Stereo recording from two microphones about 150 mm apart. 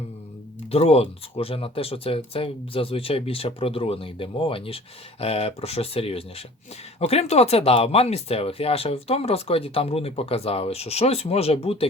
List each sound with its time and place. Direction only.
0.7 s speech: 40° left (ahead or behind)